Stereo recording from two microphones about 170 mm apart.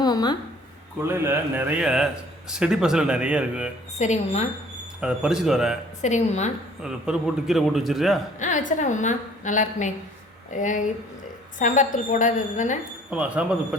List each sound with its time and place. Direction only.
0.0 s a sound: 25° left (ahead or behind)
1.0 s a man's voice: 15° right (ahead or behind)
3.9 s a woman's voice: 40° left (ahead or behind)
4.9 s a man's voice: 5° right (ahead or behind)
6.0 s a woman's voice: 45° left (ahead or behind)
6.8 s a man's voice: 5° right (ahead or behind)
8.4 s a woman's voice: 50° left (ahead or behind)
13.1 s a man's voice: 5° right (ahead or behind)